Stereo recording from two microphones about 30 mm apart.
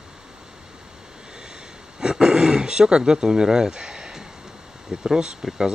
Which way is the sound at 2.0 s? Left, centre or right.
Right.